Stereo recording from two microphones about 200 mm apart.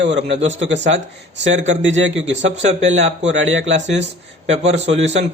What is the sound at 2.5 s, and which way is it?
Speech, 35° right (ahead or behind).